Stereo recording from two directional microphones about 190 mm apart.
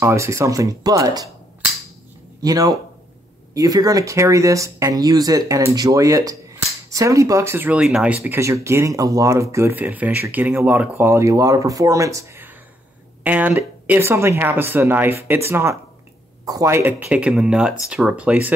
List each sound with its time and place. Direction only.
0.0 s speech: 15° right (ahead or behind)
2.4 s speech: 20° right (ahead or behind)